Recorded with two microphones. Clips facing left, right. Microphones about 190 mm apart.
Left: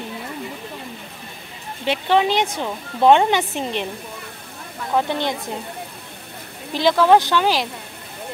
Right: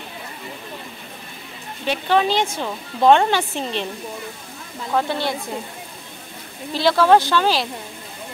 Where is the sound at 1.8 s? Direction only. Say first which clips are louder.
Left 1 dB; 20° left (ahead or behind).